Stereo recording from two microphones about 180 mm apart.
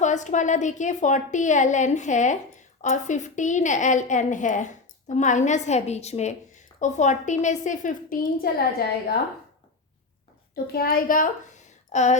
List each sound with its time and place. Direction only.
0.0 s a woman's voice: 40° left (ahead or behind)
10.5 s a woman's voice: 60° left (ahead or behind); by 12.1 s 40° left (ahead or behind)